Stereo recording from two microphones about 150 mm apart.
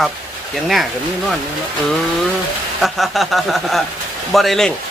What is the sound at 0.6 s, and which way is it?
Speech, centre (ahead or behind).